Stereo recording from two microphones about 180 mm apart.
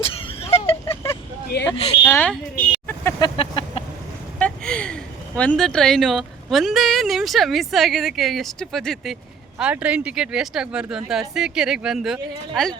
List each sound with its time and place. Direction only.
0.0 s a sound: 30° left (ahead or behind)
1.6 s speech: 30° left (ahead or behind)
2.0 s speech: 10° left (ahead or behind)
2.8 s vehicle: 10° left (ahead or behind)
3.2 s chicken: 30° left (ahead or behind)
4.4 s speech: 5° left (ahead or behind)